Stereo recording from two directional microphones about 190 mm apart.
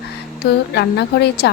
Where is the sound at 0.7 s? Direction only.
60° left (ahead or behind).